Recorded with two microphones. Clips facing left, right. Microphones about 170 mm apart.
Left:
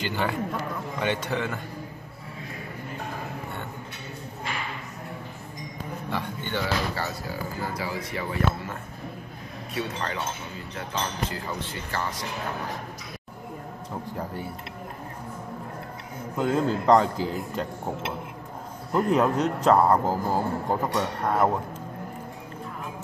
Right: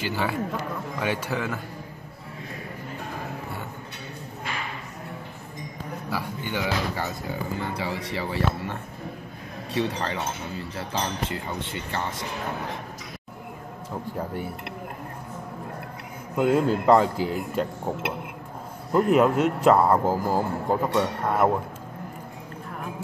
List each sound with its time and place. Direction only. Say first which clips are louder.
0.0 s a man's voice: right 1 dB; 5° right (ahead or behind)
6.0 s speech: right 1 dB; 10° right (ahead or behind); by 8.7 s 30° right (ahead or behind)
9.8 s speech: right 4 dB; 30° right (ahead or behind)
16.3 s speech: right 3 dB; 10° right (ahead or behind)
19.0 s speech: right 3 dB; 10° right (ahead or behind)